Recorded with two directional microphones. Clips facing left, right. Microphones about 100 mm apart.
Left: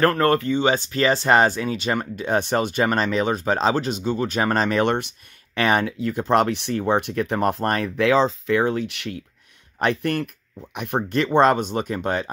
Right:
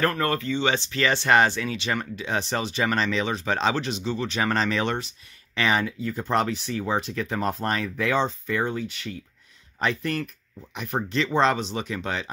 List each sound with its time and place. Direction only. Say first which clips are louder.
0.0 s speech: left 6 dB; 50° left (ahead or behind); by 9.2 s 75° left (ahead or behind)
9.8 s speech: left 4 dB; 60° left (ahead or behind)